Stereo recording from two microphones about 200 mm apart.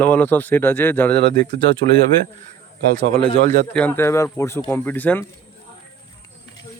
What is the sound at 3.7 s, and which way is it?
Speech, 10° left (ahead or behind).